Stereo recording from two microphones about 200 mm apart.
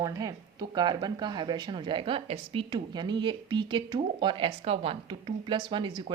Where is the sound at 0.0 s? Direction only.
15° right (ahead or behind).